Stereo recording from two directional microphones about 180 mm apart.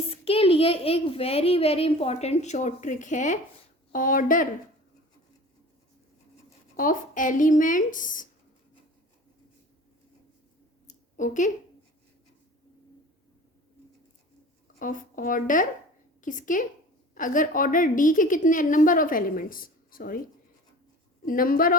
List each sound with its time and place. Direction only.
0.1 s a child's voice: 30° left (ahead or behind); by 4.4 s 50° left (ahead or behind)
6.7 s a woman's voice: 50° left (ahead or behind)
10.8 s a sound: 45° left (ahead or behind)
14.8 s a woman's voice: 50° left (ahead or behind)
21.2 s a woman's voice: 50° left (ahead or behind)